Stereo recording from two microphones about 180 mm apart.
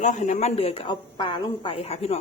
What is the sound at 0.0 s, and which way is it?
A woman's voice, 45° left (ahead or behind).